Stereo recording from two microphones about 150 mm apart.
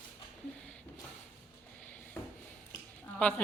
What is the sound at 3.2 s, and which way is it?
Speech, 10° left (ahead or behind).